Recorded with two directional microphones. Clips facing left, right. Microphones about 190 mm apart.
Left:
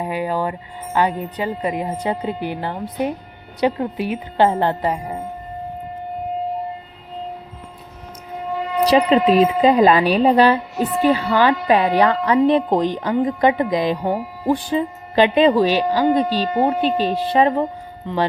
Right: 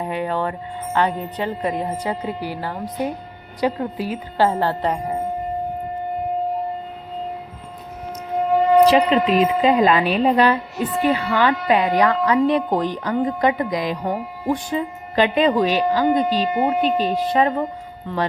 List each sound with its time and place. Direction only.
0.0 s speech: 5° left (ahead or behind)
2.0 s speech: 20° left (ahead or behind)
8.9 s speech: 35° left (ahead or behind)